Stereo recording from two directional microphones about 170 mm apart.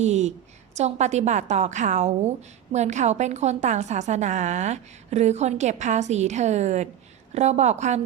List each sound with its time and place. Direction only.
0.0 s a woman's voice: 40° right (ahead or behind)